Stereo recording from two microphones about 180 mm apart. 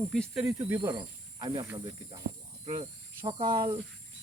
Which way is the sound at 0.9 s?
25° right (ahead or behind).